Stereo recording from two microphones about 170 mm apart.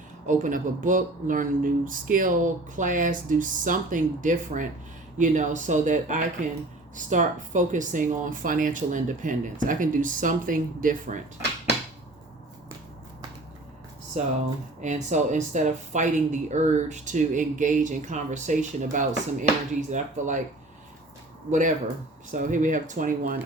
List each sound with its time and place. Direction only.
0.3 s speech: 50° right (ahead or behind)
14.2 s speech: 45° right (ahead or behind)
22.3 s speech: 50° right (ahead or behind)